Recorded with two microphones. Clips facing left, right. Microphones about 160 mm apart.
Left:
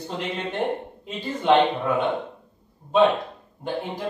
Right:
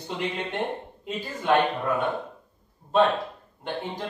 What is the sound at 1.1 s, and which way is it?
Speech, 25° left (ahead or behind).